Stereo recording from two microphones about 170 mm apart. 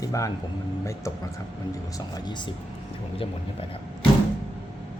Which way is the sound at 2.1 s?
25° left (ahead or behind).